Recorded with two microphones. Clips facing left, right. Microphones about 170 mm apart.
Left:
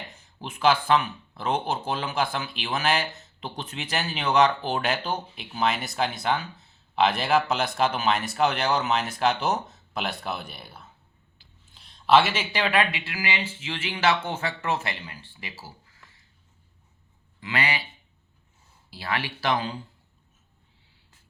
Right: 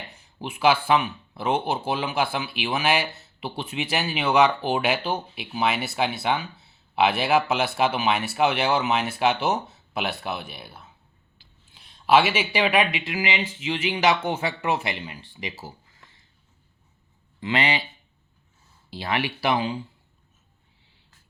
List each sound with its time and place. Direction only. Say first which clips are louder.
0.1 s speech: right 4 dB; 10° right (ahead or behind)
17.4 s a man's voice: right 4 dB; 25° right (ahead or behind)
18.9 s speech: right 4 dB; 20° right (ahead or behind)